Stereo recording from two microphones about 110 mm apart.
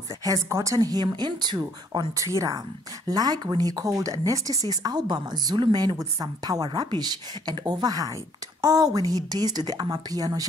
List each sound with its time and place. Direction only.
0.2 s a woman's voice: 30° right (ahead or behind)
0.7 s a woman's voice: 40° right (ahead or behind)